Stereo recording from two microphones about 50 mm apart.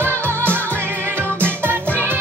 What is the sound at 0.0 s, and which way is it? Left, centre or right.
Music, right.